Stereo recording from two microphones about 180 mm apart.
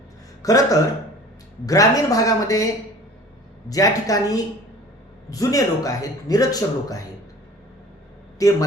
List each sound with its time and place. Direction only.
0.4 s speech: 20° left (ahead or behind)
3.7 s speech: 20° left (ahead or behind)
8.4 s a man's voice: 20° left (ahead or behind)